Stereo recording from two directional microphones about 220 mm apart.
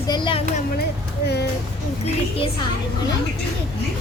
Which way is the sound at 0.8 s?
50° left (ahead or behind).